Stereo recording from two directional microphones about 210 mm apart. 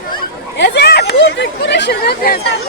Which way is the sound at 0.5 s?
55° left (ahead or behind).